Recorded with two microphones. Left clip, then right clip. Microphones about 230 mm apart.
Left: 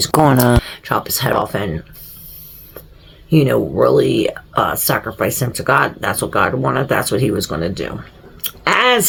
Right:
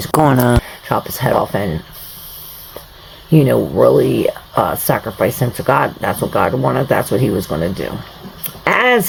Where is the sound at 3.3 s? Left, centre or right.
Right.